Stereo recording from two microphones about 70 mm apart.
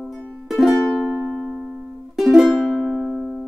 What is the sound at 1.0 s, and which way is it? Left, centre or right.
Music, right.